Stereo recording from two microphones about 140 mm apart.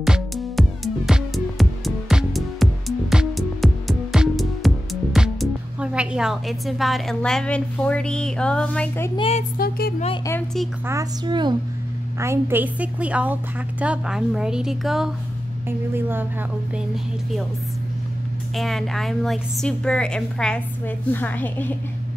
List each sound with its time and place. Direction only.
0.0 s music: centre (ahead or behind)
7.2 s a woman's voice: 5° left (ahead or behind)
9.6 s music: 90° left
11.2 s a woman's voice: 35° right (ahead or behind)
12.2 s a woman's voice: 20° right (ahead or behind); by 15.0 s centre (ahead or behind)
15.9 s a woman's voice: 15° right (ahead or behind)
16.7 s a woman's voice: centre (ahead or behind)
18.6 s a woman's voice: centre (ahead or behind)